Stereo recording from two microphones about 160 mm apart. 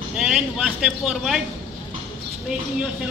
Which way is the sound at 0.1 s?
5° right (ahead or behind).